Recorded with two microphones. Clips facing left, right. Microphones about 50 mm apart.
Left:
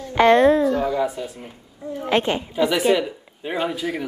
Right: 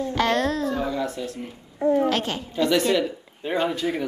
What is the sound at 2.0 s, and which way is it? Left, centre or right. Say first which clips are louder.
Speech: left 4 dB; left.